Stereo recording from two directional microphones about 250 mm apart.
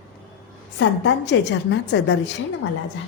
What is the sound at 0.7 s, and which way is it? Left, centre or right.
A woman's voice, left.